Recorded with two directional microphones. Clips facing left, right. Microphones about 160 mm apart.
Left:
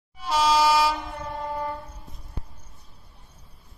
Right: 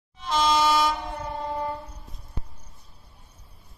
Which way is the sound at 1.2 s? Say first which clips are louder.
Even; 25° right (ahead or behind).